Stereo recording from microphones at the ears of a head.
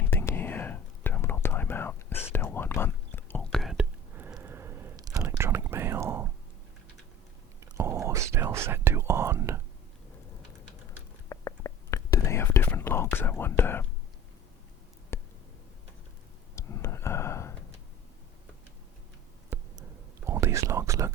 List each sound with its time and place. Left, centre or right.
0.0 s whispering: left
4.2 s a sound: right
7.6 s whispering: right
10.8 s whispering: left
16.6 s a sound: left
20.2 s whispering: right